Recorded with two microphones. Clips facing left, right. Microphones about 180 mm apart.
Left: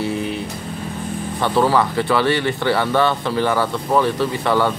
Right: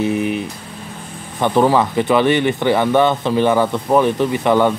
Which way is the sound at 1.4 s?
20° right (ahead or behind).